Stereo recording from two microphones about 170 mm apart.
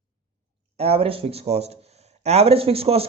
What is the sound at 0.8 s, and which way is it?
A man's voice, 35° right (ahead or behind).